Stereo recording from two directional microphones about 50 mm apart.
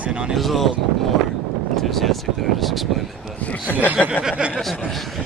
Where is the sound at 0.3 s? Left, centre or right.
Centre.